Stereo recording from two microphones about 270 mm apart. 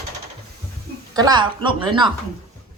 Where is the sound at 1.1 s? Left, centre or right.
Centre.